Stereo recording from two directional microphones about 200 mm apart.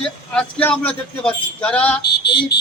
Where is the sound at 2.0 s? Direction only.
55° left (ahead or behind).